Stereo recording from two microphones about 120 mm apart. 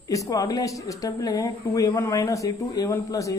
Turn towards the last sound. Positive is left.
turn(degrees=25)  # may be behind; listen again after turning